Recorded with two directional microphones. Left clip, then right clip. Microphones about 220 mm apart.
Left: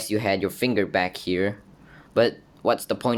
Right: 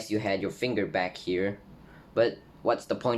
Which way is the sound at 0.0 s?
50° left (ahead or behind).